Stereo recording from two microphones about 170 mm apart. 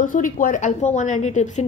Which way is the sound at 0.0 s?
50° left (ahead or behind).